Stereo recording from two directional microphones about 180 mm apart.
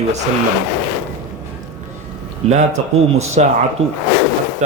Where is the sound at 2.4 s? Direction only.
35° right (ahead or behind).